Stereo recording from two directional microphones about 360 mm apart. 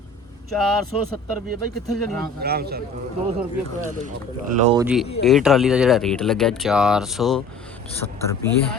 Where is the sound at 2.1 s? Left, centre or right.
Centre.